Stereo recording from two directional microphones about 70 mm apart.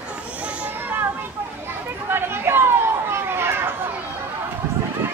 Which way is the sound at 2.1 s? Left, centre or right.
Right.